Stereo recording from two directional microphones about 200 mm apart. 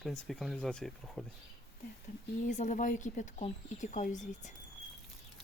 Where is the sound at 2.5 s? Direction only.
40° left (ahead or behind).